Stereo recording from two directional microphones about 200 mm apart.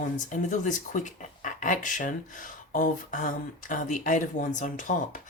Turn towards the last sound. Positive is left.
turn(degrees=40)  # may be behind; listen again after turning